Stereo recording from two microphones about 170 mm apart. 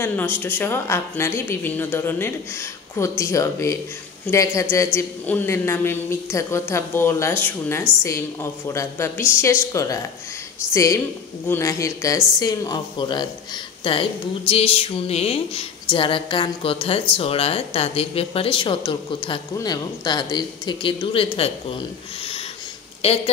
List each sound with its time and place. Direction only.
0.0 s a woman's voice: 10° left (ahead or behind); by 21.5 s 35° left (ahead or behind)
23.0 s speech: 35° left (ahead or behind)